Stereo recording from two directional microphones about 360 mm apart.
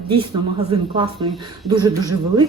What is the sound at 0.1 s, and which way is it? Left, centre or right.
A woman's voice, centre.